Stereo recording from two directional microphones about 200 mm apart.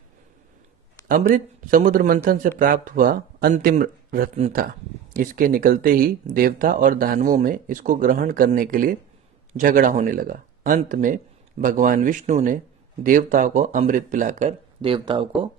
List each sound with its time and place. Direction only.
1.0 s speech: 45° right (ahead or behind)
14.8 s speech: 25° right (ahead or behind)